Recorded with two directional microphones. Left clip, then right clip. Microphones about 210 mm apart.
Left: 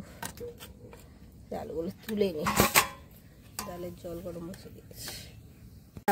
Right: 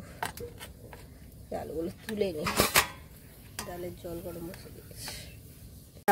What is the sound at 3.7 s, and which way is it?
Speech, 5° left (ahead or behind).